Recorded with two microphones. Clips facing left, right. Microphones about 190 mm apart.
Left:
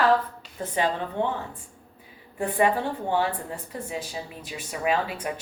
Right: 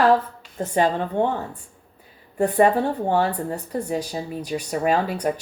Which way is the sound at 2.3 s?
40° right (ahead or behind).